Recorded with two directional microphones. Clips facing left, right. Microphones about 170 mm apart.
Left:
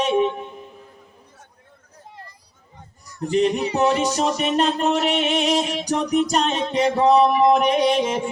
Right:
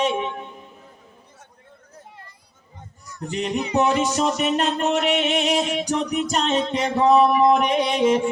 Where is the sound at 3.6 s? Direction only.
30° left (ahead or behind).